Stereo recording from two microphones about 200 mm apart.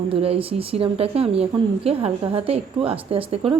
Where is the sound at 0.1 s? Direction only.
30° right (ahead or behind).